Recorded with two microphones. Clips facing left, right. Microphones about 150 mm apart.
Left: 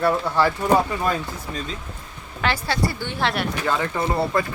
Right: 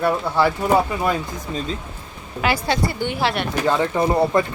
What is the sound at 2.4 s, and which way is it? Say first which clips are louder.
Speech: right 3 dB; 10° right (ahead or behind).